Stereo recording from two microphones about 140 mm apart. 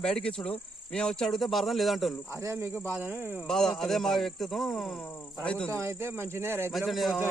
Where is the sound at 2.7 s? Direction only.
15° left (ahead or behind).